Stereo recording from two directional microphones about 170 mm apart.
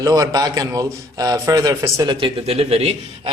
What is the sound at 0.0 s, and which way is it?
A man's voice, 20° right (ahead or behind).